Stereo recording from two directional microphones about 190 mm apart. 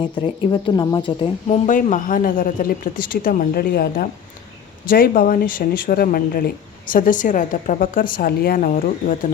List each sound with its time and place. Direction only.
0.2 s speech: 20° left (ahead or behind)
1.5 s speech: 40° left (ahead or behind)